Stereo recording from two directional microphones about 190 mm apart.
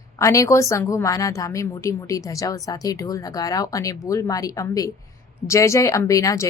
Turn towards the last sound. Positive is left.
turn(degrees=15)  # may be behind; listen again after turning